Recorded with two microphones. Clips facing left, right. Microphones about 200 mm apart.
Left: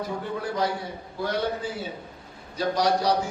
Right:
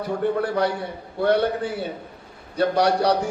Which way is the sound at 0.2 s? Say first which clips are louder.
Right 8 dB; 60° right (ahead or behind).